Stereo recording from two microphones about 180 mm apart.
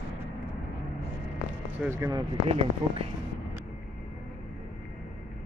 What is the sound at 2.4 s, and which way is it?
Speech, 35° right (ahead or behind).